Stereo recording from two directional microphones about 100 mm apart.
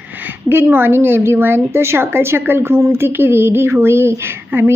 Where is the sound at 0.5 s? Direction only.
20° right (ahead or behind).